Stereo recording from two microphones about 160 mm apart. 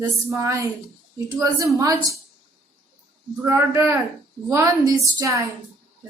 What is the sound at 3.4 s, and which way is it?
A woman's voice, 15° right (ahead or behind).